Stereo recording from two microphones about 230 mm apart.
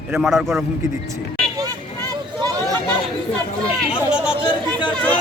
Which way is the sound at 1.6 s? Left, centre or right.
Centre.